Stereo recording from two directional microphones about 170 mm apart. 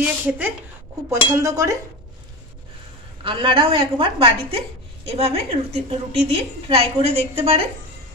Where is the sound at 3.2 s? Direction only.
30° right (ahead or behind).